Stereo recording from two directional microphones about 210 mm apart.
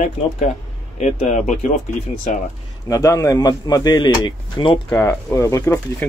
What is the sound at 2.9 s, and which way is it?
A man's voice, 15° left (ahead or behind).